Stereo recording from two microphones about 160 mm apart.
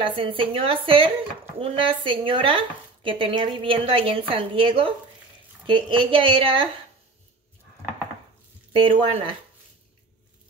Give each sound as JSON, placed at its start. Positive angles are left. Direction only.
{"t": 0.0, "sound": "speech", "side_deg": -35}
{"t": 8.7, "sound": "speech", "side_deg": -35}